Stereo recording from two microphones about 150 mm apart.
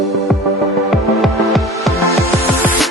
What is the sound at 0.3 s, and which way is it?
Music, centre (ahead or behind).